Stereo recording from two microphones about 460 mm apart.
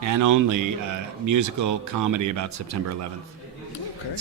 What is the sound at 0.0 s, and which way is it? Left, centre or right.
Speech, right.